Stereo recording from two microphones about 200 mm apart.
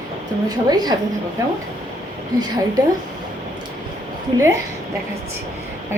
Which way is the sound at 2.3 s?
20° right (ahead or behind).